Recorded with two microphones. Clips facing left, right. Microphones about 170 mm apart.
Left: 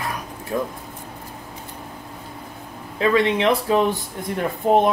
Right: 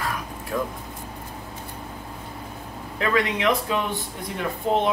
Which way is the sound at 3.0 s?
25° left (ahead or behind).